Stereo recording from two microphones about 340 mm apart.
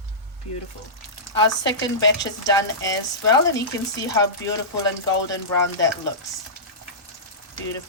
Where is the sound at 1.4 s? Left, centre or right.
Centre.